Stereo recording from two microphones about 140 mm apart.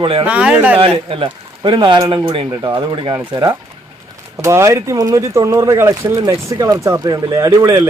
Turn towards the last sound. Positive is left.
turn(degrees=-20)  # may be behind; listen again after turning